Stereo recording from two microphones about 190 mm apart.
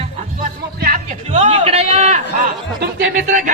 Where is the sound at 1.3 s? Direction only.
30° right (ahead or behind).